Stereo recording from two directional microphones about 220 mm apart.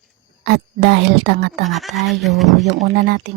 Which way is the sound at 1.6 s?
Centre (ahead or behind).